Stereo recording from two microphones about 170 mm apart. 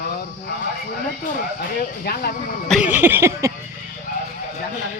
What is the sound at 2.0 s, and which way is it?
Speech, 65° left (ahead or behind).